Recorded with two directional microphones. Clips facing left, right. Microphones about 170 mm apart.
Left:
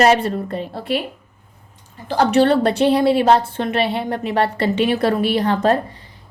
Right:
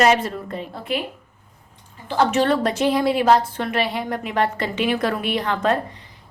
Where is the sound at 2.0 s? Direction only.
35° left (ahead or behind).